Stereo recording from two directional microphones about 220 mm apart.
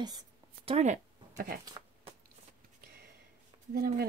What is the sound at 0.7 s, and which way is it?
Speech, 30° right (ahead or behind).